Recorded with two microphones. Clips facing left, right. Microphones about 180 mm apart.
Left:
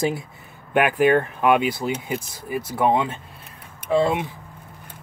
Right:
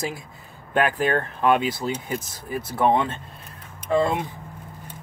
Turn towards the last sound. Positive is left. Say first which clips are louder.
# left 2 dB
turn(degrees=5)  # may be behind; listen again after turning